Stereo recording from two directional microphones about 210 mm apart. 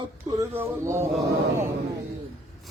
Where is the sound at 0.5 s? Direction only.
10° right (ahead or behind).